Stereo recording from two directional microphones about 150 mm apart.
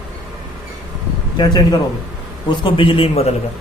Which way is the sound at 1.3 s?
30° left (ahead or behind).